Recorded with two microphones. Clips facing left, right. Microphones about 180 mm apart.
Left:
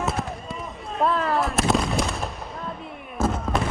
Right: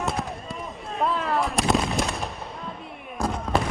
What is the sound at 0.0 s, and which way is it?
Fireworks, centre (ahead or behind).